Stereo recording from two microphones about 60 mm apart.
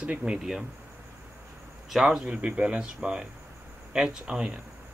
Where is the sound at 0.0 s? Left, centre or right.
Centre.